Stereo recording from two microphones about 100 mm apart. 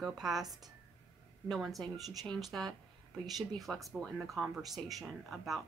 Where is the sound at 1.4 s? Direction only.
Centre (ahead or behind).